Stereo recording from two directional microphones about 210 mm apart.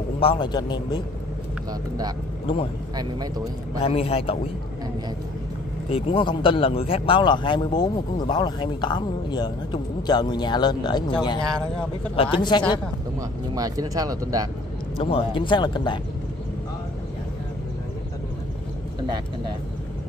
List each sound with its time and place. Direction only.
0.2 s speech: 25° left (ahead or behind)
1.7 s speech: 20° right (ahead or behind)
2.4 s speech: 25° left (ahead or behind)
3.8 s speech: 30° left (ahead or behind)
5.9 s speech: 25° left (ahead or behind)
12.2 s speech: 20° left (ahead or behind)
13.6 s speech: 15° right (ahead or behind)
15.0 s speech: 25° left (ahead or behind)